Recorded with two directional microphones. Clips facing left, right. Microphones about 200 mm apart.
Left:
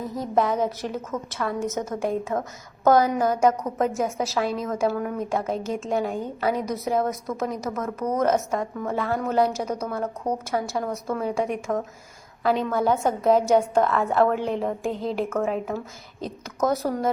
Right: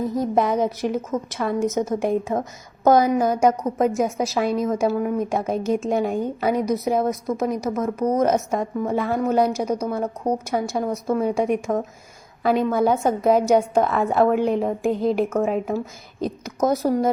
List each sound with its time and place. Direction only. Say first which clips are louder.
0.2 s a woman's voice: right 1 dB; 15° right (ahead or behind)